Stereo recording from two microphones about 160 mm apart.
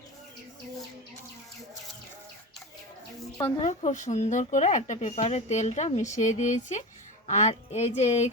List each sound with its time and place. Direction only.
3.6 s speech: 45° left (ahead or behind)